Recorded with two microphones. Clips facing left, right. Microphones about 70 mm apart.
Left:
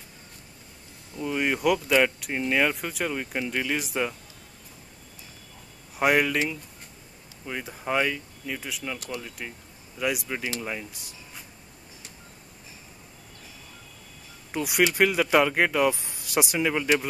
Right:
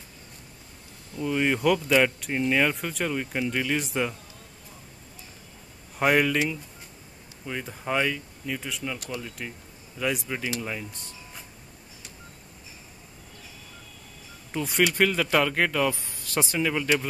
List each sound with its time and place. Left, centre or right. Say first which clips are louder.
1.1 s speech: right 2 dB; centre
5.9 s speech: even; centre
14.5 s speech: left 1 dB; centre